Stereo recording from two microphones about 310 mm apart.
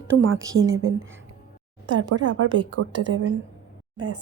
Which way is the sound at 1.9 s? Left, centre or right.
Right.